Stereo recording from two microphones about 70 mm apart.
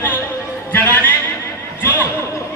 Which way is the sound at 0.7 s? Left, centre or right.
Left.